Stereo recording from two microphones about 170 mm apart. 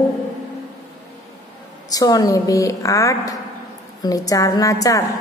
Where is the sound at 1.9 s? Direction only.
20° left (ahead or behind).